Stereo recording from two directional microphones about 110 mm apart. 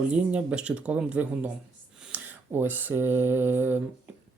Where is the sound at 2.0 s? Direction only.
15° right (ahead or behind).